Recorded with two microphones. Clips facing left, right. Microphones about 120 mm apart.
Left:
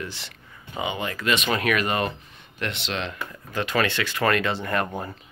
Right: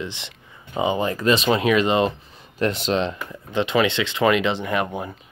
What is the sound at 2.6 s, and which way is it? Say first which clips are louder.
Speech: right 8 dB; 35° right (ahead or behind).